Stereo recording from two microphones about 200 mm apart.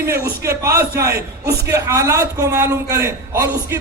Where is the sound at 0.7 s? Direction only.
15° right (ahead or behind).